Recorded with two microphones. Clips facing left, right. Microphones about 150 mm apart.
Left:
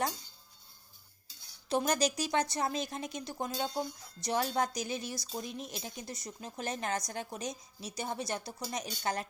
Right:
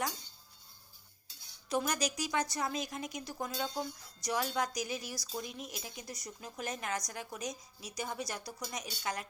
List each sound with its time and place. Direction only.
1.7 s speech: 30° left (ahead or behind)